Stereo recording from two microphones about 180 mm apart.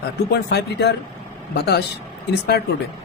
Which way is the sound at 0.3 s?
70° left (ahead or behind).